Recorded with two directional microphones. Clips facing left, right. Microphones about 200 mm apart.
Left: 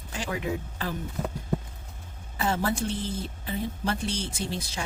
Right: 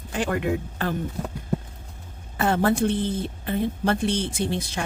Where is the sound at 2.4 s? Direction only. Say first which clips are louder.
Right 6 dB; 55° right (ahead or behind).